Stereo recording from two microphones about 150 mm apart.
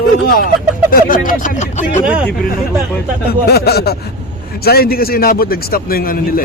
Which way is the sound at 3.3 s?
90° left.